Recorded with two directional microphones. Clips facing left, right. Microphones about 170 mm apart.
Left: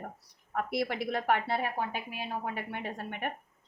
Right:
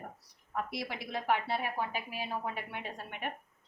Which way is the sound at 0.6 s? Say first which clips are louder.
Left 6 dB; 60° left (ahead or behind).